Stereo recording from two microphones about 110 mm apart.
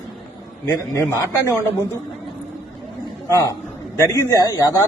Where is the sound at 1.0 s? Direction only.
25° left (ahead or behind).